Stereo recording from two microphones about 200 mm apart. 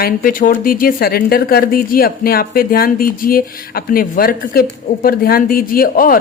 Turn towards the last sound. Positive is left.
turn(degrees=45)  # may be behind; listen again after turning